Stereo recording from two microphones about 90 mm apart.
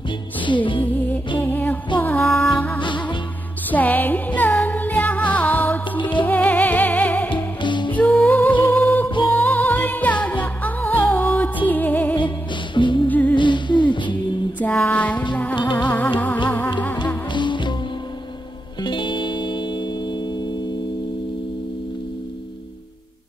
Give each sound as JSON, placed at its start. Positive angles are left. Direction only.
{"t": 0.4, "sound": "music", "side_deg": 65}
{"t": 0.9, "sound": "music", "side_deg": 20}
{"t": 7.2, "sound": "music", "side_deg": 60}
{"t": 7.9, "sound": "music", "side_deg": 15}
{"t": 12.7, "sound": "music", "side_deg": 60}
{"t": 13.1, "sound": "music", "side_deg": 15}
{"t": 13.4, "sound": "music", "side_deg": 60}
{"t": 14.6, "sound": "a sound", "side_deg": 20}
{"t": 15.8, "sound": "music", "side_deg": 15}
{"t": 17.3, "sound": "music", "side_deg": 60}
{"t": 18.8, "sound": "music", "side_deg": 60}